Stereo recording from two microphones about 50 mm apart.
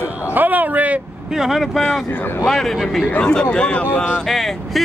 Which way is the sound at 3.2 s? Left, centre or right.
Centre.